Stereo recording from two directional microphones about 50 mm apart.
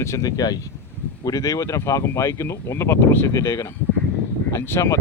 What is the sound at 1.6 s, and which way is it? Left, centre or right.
Speech, left.